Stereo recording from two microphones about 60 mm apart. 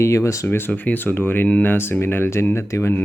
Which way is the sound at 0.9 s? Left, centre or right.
Left.